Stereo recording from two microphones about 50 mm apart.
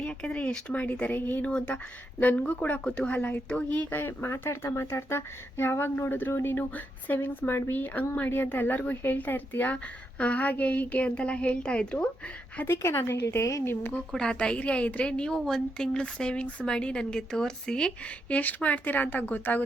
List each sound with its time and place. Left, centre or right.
0.0 s speech: centre
1.0 s speech: left
1.4 s speech: left
2.8 s speech: left
3.2 s speech: left
3.8 s speech: left
9.7 s speech: left
12.6 s a woman's voice: left
14.1 s speech: centre
18.3 s speech: left